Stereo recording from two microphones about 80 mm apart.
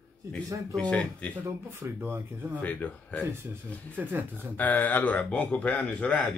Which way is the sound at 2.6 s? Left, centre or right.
Centre.